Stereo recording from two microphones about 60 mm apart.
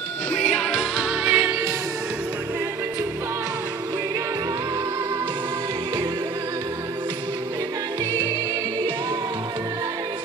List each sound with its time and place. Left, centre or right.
0.3 s music: centre
0.7 s music: centre
1.2 s music: right
8.0 s music: right